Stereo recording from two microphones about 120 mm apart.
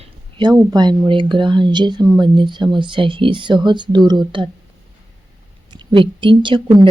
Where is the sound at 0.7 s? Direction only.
35° right (ahead or behind).